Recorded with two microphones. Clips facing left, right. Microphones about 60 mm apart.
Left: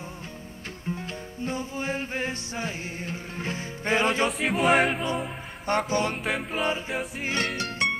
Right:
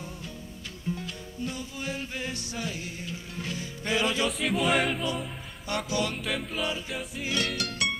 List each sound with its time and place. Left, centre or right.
0.8 s music: left
4.4 s music: left
5.1 s music: left
6.5 s a capella: left
6.9 s music: left
7.2 s music: left